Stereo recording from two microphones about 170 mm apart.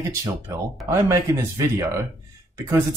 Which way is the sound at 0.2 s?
20° right (ahead or behind).